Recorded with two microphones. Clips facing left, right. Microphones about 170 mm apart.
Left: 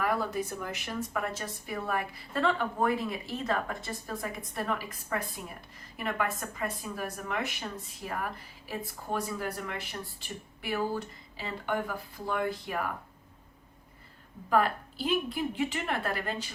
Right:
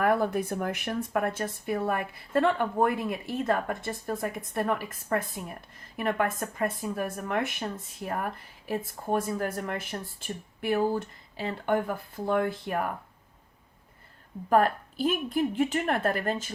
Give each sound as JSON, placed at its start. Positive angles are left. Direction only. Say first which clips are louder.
{"t": 0.0, "sound": "a woman's voice", "louder": "right 5 dB", "side_deg": -55}
{"t": 14.5, "sound": "a woman's voice", "louder": "right 4 dB", "side_deg": -45}